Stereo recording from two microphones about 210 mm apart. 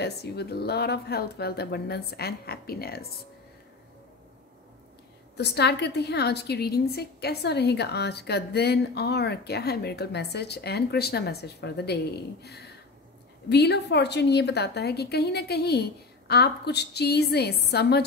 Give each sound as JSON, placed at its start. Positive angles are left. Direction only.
{"t": 0.0, "sound": "a woman's voice", "side_deg": 50}
{"t": 5.4, "sound": "a woman's voice", "side_deg": 50}